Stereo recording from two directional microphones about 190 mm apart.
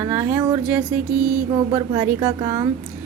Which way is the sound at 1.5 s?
25° right (ahead or behind).